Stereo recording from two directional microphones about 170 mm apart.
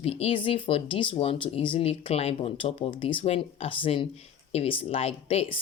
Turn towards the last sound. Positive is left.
turn(degrees=35)  # may be behind; listen again after turning